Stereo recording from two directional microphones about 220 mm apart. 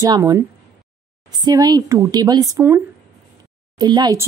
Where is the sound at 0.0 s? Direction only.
15° right (ahead or behind).